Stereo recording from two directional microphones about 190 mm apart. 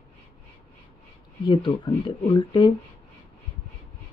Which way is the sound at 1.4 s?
25° left (ahead or behind).